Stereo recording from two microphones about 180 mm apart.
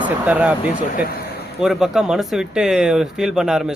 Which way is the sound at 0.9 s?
55° left (ahead or behind).